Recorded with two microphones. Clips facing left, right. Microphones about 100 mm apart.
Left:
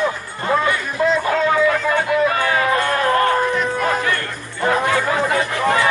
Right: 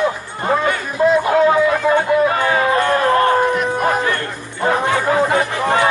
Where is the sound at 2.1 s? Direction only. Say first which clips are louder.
Right 2 dB; 25° right (ahead or behind).